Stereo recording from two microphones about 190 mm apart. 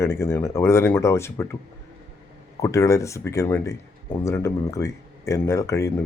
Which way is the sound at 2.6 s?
15° left (ahead or behind).